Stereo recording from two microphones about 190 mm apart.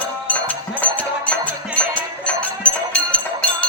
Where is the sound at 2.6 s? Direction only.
5° left (ahead or behind).